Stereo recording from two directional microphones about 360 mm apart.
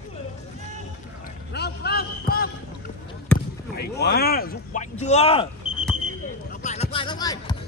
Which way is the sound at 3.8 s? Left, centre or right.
Left.